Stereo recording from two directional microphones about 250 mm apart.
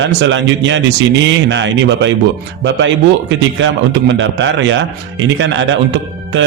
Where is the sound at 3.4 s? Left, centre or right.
Right.